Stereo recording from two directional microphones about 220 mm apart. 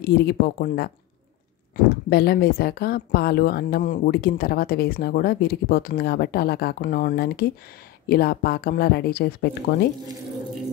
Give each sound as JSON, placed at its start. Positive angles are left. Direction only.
{"t": 0.0, "sound": "speech", "side_deg": 45}
{"t": 2.0, "sound": "speech", "side_deg": 45}